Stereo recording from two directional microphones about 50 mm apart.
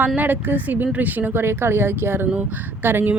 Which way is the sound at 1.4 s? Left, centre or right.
Right.